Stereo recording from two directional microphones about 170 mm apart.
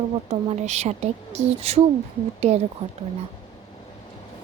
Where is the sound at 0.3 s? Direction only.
40° right (ahead or behind).